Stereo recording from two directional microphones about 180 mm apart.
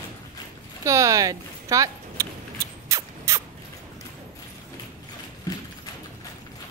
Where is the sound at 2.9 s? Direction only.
15° right (ahead or behind).